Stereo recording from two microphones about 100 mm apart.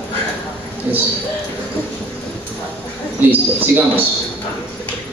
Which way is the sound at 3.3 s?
20° right (ahead or behind).